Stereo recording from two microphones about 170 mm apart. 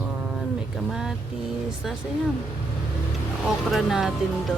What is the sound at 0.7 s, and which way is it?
Speech, centre (ahead or behind).